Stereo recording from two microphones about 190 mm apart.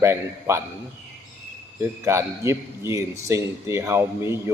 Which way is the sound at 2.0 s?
15° right (ahead or behind).